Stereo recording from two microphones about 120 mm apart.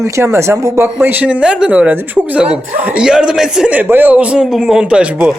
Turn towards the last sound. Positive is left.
turn(degrees=-10)  # may be behind; listen again after turning